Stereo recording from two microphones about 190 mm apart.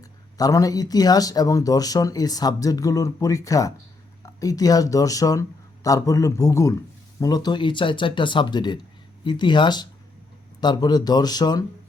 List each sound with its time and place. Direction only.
0.0 s a man's voice: 20° left (ahead or behind)